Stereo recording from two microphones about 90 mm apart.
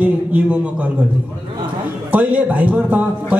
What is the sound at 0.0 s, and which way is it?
Speech, 15° right (ahead or behind).